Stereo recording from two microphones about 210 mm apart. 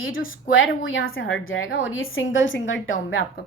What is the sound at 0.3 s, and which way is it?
A woman's voice, 70° left (ahead or behind).